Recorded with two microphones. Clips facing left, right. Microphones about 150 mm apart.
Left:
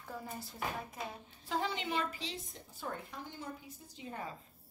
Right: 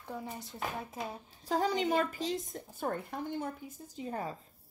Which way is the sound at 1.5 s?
40° right (ahead or behind).